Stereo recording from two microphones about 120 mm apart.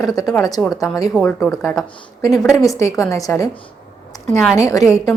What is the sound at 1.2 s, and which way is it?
Speech, 5° left (ahead or behind).